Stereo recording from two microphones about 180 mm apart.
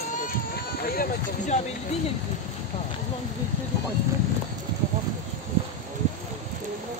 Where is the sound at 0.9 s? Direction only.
50° left (ahead or behind).